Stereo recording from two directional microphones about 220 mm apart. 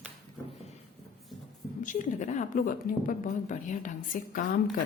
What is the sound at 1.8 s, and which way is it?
A woman's voice, 35° left (ahead or behind).